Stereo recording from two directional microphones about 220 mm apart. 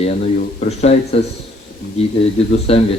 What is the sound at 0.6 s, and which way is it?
Speech, 30° left (ahead or behind).